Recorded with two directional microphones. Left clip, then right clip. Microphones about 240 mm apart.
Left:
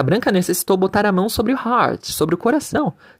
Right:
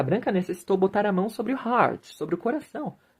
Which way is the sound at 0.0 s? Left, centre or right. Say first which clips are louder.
Left 8 dB; left.